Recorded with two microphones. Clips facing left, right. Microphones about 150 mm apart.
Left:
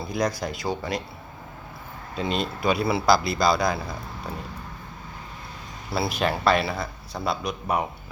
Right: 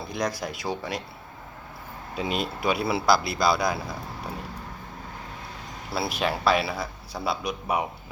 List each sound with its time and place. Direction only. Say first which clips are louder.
0.0 s a man's voice: left 3 dB; centre (ahead or behind)
2.1 s a man's voice: left 1 dB; 5° right (ahead or behind)
5.9 s a man's voice: left 2 dB; centre (ahead or behind)